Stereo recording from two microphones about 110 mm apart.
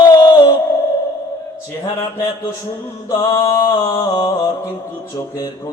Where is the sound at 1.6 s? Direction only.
30° left (ahead or behind).